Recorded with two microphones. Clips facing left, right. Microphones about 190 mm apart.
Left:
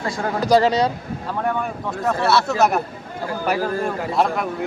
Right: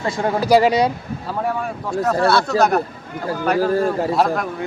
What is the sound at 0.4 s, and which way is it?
Speech, 10° right (ahead or behind).